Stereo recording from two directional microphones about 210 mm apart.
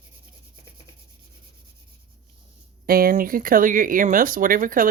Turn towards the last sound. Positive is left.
turn(degrees=-40)  # may be behind; listen again after turning